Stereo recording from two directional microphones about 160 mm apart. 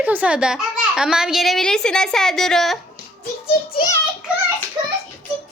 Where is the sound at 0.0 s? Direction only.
10° right (ahead or behind).